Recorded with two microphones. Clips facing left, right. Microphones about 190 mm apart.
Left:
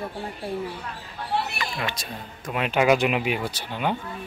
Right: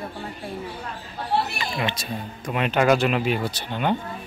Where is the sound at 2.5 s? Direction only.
5° left (ahead or behind).